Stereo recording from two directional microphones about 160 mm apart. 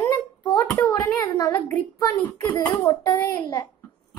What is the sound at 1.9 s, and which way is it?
A child's voice, 20° left (ahead or behind).